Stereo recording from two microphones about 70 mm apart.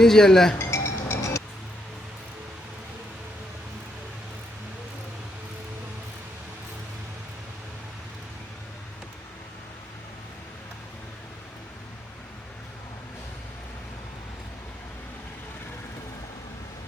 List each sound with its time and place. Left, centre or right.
0.0 s speech: centre
0.6 s music: left